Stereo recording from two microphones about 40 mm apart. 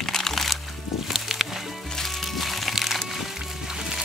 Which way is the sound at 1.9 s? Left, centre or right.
Centre.